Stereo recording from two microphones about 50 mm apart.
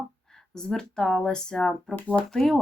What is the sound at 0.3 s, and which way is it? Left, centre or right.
Speech, centre.